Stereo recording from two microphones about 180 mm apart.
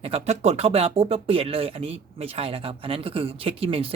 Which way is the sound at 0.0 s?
35° right (ahead or behind).